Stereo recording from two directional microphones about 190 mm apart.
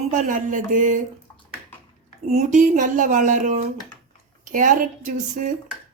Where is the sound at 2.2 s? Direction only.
35° right (ahead or behind).